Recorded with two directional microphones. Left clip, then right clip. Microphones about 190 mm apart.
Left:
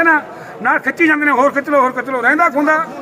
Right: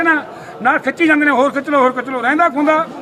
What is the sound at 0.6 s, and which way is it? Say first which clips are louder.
A man's voice: even; 25° right (ahead or behind).